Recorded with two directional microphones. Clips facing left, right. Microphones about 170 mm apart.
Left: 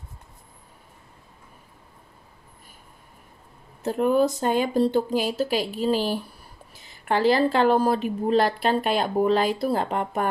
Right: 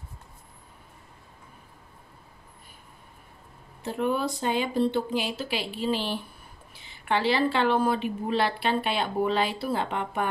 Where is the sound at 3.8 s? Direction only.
40° left (ahead or behind).